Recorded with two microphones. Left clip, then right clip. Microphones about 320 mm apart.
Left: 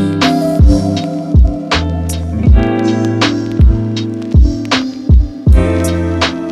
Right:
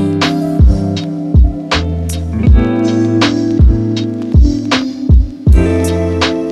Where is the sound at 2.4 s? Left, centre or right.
Centre.